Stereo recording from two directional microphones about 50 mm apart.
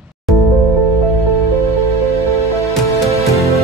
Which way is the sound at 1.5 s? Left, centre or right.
Left.